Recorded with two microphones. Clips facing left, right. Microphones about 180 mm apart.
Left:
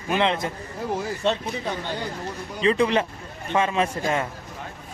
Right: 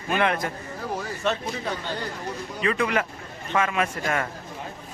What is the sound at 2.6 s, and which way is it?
A man's voice, 30° left (ahead or behind).